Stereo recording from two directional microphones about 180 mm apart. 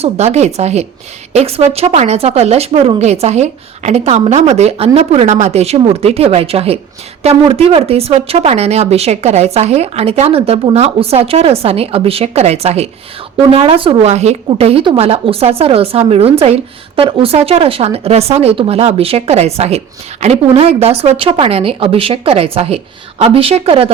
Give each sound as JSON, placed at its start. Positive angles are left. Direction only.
{"t": 0.0, "sound": "speech", "side_deg": -35}